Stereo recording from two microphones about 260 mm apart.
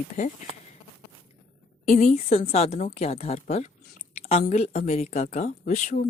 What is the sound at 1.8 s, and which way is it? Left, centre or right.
Speech, left.